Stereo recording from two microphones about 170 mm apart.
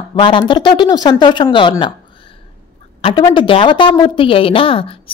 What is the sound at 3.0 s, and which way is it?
A woman's voice, 30° left (ahead or behind).